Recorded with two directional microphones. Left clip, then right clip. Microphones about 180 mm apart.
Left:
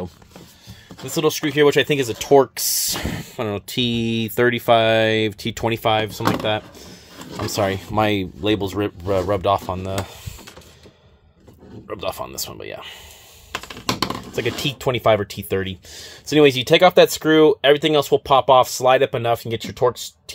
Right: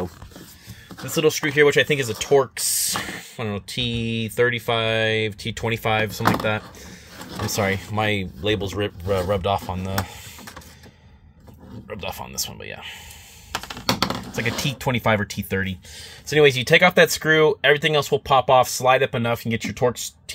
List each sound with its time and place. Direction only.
1.1 s speech: 30° left (ahead or behind)
11.9 s speech: 45° left (ahead or behind)
14.3 s speech: 40° left (ahead or behind)
19.8 s speech: 5° left (ahead or behind)